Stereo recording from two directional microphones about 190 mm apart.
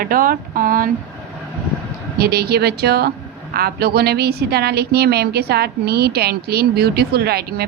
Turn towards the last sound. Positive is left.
turn(degrees=-55)  # may be behind; listen again after turning